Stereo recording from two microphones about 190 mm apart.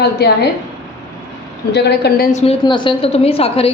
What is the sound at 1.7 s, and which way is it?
Speech, 60° left (ahead or behind).